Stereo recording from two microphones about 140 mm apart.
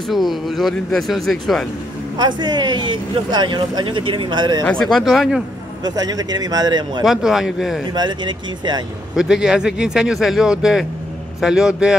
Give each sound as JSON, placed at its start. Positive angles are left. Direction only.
{"t": 0.1, "sound": "speech", "side_deg": 0}
{"t": 2.1, "sound": "speech", "side_deg": -30}
{"t": 4.9, "sound": "speech", "side_deg": 0}
{"t": 5.9, "sound": "a man's voice", "side_deg": -30}
{"t": 7.1, "sound": "speech", "side_deg": -5}
{"t": 7.9, "sound": "speech", "side_deg": -30}
{"t": 9.1, "sound": "speech", "side_deg": -5}